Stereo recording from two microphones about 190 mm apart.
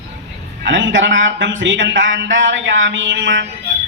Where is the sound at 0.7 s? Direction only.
80° right.